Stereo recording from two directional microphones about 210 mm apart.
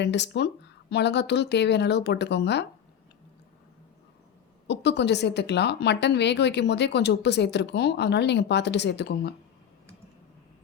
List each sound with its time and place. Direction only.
0.0 s speech: 55° left (ahead or behind)
4.7 s a woman's voice: 55° left (ahead or behind)